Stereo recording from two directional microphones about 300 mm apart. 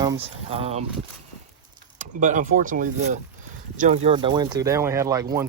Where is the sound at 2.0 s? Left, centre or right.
Right.